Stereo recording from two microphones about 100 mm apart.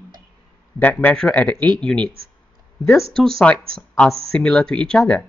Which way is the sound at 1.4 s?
10° left (ahead or behind).